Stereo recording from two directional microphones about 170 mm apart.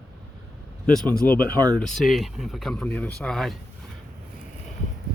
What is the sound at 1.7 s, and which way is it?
Speech, 5° left (ahead or behind).